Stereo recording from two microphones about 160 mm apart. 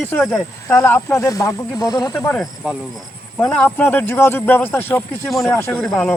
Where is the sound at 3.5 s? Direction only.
10° left (ahead or behind).